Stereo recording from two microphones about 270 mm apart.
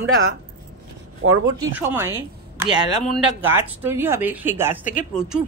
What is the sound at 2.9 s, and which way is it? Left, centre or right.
Speech, left.